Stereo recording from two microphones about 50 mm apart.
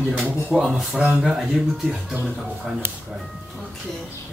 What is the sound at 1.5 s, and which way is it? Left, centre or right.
Speech, centre.